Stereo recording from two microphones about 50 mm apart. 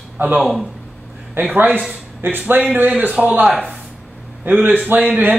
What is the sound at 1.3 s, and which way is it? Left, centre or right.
A man's voice, right.